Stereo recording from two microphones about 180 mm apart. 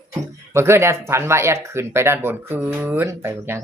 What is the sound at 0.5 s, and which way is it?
Speech, 15° right (ahead or behind).